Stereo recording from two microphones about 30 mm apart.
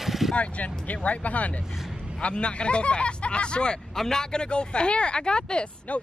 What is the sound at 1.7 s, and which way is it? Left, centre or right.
Speech, centre.